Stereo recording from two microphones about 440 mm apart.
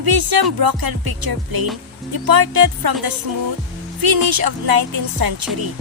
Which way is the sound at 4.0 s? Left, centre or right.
Right.